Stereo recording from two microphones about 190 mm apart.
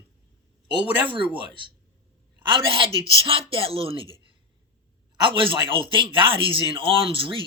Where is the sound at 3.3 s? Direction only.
30° right (ahead or behind).